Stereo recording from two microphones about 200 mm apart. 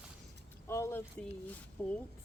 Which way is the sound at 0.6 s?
15° left (ahead or behind).